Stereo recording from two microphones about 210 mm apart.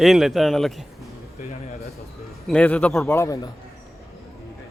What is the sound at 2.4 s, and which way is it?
Speech, 5° left (ahead or behind).